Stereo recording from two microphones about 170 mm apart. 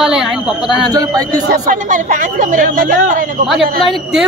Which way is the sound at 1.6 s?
50° right (ahead or behind).